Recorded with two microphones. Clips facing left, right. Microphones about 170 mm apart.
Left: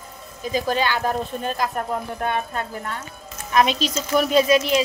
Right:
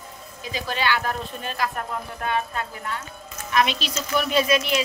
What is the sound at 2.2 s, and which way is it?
A woman's voice, 50° left (ahead or behind).